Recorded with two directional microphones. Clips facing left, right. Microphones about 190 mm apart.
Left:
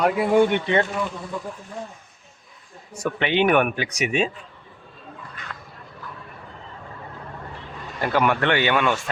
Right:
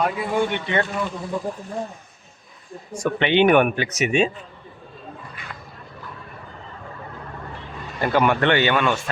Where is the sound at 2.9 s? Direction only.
5° left (ahead or behind).